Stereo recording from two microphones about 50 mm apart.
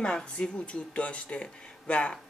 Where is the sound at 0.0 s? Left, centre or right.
Centre.